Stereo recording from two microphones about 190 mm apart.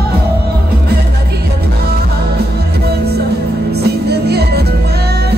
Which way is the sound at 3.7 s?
60° right (ahead or behind).